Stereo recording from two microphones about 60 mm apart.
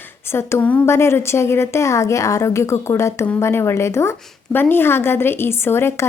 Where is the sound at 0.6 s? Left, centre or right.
Left.